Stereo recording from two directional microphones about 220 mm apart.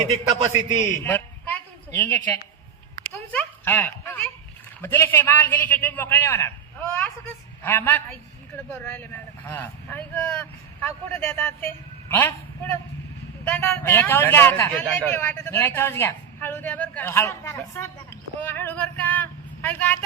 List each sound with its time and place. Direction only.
0.1 s a man's voice: 20° right (ahead or behind)
0.9 s a sound: 10° left (ahead or behind)
3.3 s a man's voice: 10° left (ahead or behind)
13.5 s a man's voice: 10° left (ahead or behind)